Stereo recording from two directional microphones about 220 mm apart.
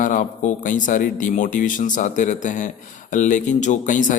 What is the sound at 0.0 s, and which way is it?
Speech, 35° left (ahead or behind).